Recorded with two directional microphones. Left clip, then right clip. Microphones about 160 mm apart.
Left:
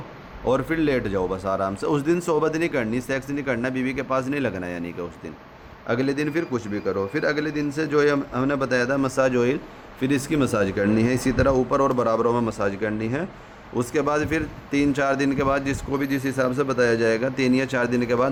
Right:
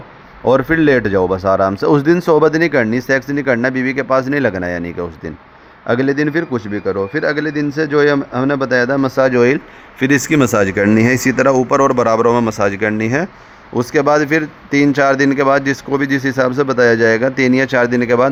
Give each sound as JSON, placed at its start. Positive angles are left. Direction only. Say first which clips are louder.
{"t": 0.4, "sound": "a man's voice", "louder": "right 10 dB", "side_deg": -50}